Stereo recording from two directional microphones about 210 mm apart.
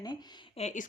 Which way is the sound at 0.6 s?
30° left (ahead or behind).